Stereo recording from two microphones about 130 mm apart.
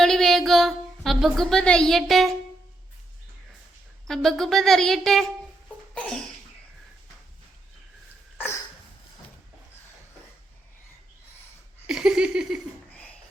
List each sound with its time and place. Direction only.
0.0 s music: 5° left (ahead or behind)
4.0 s speech: 5° left (ahead or behind)
5.9 s laughter: 5° left (ahead or behind)
8.4 s cough: 20° left (ahead or behind)
11.9 s laughter: 5° right (ahead or behind)